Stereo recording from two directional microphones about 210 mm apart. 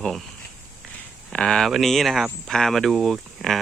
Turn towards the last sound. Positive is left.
turn(degrees=0)  # may be behind; listen again after turning